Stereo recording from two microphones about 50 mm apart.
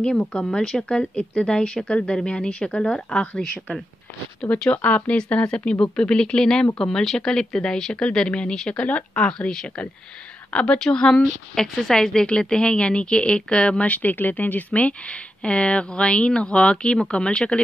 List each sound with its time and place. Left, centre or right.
0.0 s a woman's voice: centre
4.5 s a woman's voice: left
10.5 s a woman's voice: centre